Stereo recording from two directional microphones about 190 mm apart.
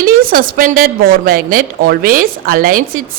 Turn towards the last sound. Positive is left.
turn(degrees=-50)  # may be behind; listen again after turning